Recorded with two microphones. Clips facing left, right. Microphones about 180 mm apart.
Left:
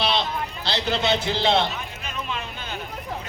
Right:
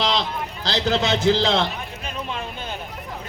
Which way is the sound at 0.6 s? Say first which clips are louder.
Right 3 dB; 90° right.